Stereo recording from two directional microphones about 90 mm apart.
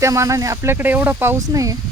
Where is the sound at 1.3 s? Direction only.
40° right (ahead or behind).